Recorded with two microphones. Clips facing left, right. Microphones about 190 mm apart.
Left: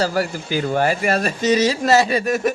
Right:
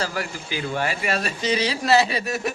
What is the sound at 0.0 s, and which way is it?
Speech, 40° left (ahead or behind).